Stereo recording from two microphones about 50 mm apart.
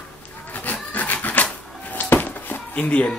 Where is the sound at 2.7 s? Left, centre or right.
Left.